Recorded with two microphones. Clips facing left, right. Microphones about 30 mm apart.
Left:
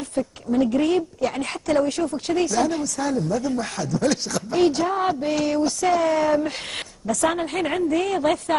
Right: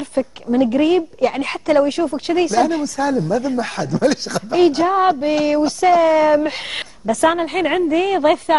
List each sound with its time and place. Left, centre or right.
0.1 s a woman's voice: right